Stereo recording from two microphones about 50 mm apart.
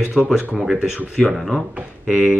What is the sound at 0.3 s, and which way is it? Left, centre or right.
Speech, centre.